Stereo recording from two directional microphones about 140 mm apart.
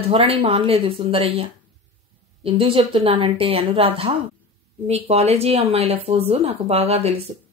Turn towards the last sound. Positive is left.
turn(degrees=-45)  # may be behind; listen again after turning